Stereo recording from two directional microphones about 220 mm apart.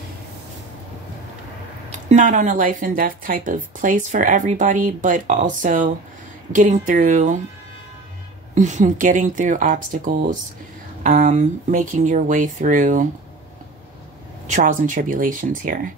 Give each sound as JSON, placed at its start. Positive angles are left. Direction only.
{"t": 1.9, "sound": "speech", "side_deg": -35}
{"t": 8.5, "sound": "speech", "side_deg": -35}
{"t": 14.5, "sound": "speech", "side_deg": -35}